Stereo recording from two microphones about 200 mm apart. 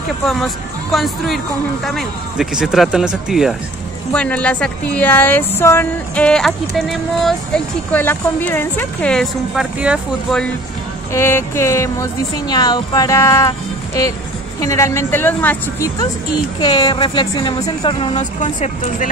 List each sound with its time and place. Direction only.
0.9 s speech: centre (ahead or behind)
11.1 s speech: 15° left (ahead or behind)
16.5 s a woman's voice: 25° left (ahead or behind)